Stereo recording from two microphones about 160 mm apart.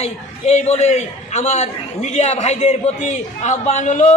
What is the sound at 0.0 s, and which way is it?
A man's voice, 45° left (ahead or behind).